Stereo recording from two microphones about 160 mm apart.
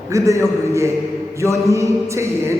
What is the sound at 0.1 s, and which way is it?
A man's voice, 20° right (ahead or behind).